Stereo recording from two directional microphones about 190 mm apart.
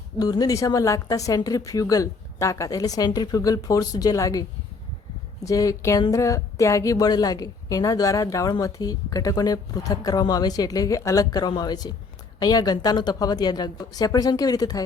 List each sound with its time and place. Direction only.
0.2 s speech: 20° left (ahead or behind)